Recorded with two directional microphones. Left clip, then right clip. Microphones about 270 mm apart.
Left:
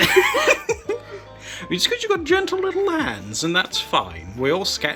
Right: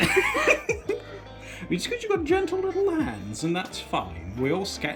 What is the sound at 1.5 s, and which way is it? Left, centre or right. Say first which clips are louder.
Speech: left 8 dB; centre.